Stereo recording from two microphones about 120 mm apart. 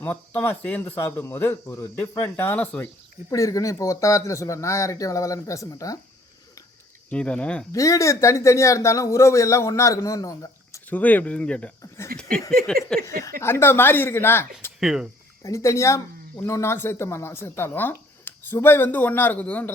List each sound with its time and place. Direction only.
0.0 s speech: 15° left (ahead or behind)
3.2 s speech: 30° left (ahead or behind)
7.1 s speech: 10° left (ahead or behind)
7.7 s speech: 25° left (ahead or behind)
10.8 s speech: 15° left (ahead or behind)
13.1 s speech: 25° left (ahead or behind)
14.8 s speech: 5° right (ahead or behind)
15.4 s speech: 25° left (ahead or behind)